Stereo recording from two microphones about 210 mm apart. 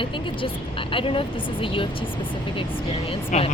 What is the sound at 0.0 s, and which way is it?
Speech, 25° left (ahead or behind).